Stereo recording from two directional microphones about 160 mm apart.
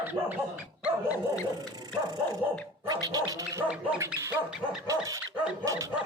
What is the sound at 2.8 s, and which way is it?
Speech, 25° right (ahead or behind).